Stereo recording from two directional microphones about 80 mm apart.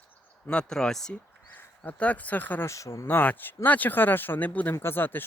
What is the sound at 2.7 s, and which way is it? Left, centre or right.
Speech, left.